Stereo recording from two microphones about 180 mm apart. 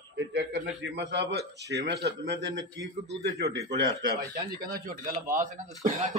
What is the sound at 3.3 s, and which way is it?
Speech, 20° right (ahead or behind).